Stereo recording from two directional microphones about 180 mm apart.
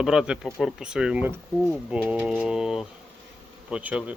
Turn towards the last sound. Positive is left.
turn(degrees=-10)  # may be behind; listen again after turning